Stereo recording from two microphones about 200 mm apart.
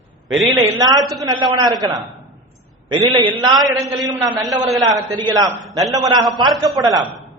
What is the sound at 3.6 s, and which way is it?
Speech, centre (ahead or behind).